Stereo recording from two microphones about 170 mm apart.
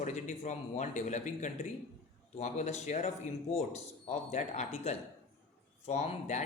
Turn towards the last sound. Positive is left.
turn(degrees=40)  # may be behind; listen again after turning